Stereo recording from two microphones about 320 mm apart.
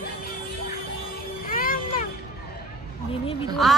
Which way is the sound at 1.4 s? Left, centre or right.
Left.